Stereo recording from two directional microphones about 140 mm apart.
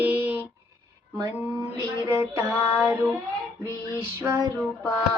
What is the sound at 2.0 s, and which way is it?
Music, 20° right (ahead or behind).